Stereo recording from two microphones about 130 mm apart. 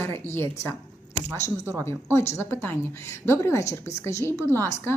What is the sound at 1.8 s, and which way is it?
A woman's voice, 20° left (ahead or behind).